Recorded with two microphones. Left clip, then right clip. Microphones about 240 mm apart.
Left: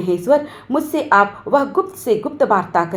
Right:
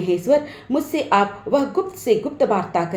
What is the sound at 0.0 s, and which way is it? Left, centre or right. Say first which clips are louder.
A woman's voice: left 2 dB; centre.